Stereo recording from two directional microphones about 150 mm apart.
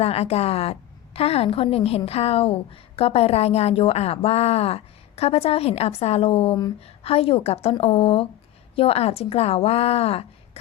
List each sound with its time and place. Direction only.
0.0 s a woman's voice: 45° left (ahead or behind)